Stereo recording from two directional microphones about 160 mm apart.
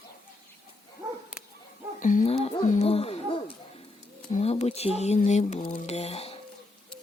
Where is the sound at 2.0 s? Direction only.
55° left (ahead or behind).